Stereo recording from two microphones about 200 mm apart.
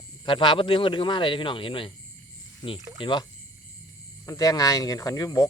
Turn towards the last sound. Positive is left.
turn(degrees=20)  # may be behind; listen again after turning